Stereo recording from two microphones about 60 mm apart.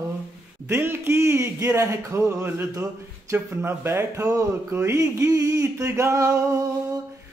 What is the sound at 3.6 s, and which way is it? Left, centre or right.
Speech, right.